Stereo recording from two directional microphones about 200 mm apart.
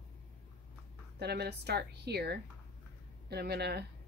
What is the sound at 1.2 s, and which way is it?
Speech, 55° right (ahead or behind).